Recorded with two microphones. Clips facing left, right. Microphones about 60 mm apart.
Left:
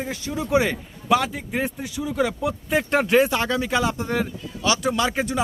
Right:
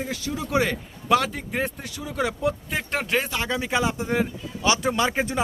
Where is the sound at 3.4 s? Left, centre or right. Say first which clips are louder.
Left 2 dB; centre.